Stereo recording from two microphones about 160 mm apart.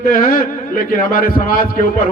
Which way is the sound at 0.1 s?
60° left (ahead or behind).